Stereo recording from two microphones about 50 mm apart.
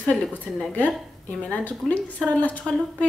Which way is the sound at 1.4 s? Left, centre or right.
Left.